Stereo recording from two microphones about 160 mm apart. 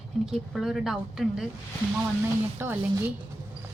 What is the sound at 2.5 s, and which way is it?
Speech, 15° right (ahead or behind).